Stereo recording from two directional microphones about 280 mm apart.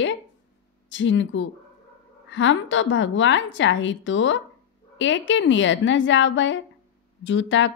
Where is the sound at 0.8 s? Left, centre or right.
Left.